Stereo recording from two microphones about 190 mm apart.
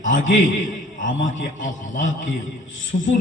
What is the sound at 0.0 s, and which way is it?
A man's voice, 40° left (ahead or behind).